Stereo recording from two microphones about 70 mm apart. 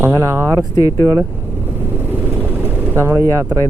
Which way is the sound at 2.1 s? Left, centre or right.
Right.